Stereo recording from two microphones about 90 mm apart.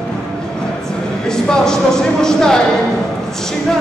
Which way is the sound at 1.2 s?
5° left (ahead or behind).